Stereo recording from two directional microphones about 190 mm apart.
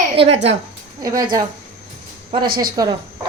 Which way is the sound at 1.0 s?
20° right (ahead or behind).